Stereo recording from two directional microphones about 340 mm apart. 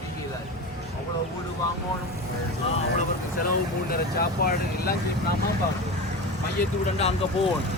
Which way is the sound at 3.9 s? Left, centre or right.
Left.